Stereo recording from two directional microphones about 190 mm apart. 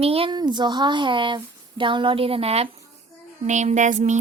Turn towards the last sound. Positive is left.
turn(degrees=-40)  # may be behind; listen again after turning